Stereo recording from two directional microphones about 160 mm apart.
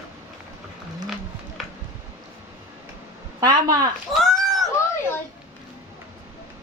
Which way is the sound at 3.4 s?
25° right (ahead or behind).